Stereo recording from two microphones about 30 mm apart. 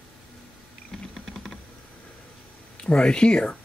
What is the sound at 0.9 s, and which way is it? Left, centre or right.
Typing, centre.